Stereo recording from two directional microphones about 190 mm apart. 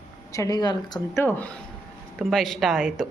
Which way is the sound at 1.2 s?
10° left (ahead or behind).